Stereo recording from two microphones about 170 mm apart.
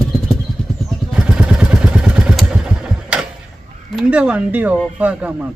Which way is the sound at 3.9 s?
5° right (ahead or behind).